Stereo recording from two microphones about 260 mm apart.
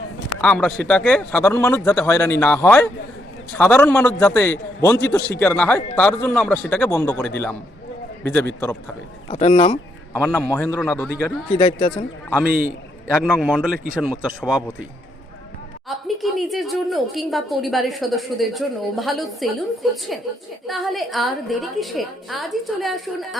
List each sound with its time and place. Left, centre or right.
0.4 s a woman's voice: centre
9.3 s speech: left
10.2 s a man's voice: centre
11.5 s speech: left
12.5 s a man's voice: right
13.1 s a woman's voice: centre
16.0 s a woman's voice: centre